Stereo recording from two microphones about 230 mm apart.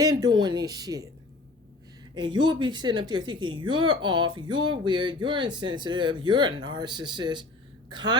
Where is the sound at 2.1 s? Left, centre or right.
Centre.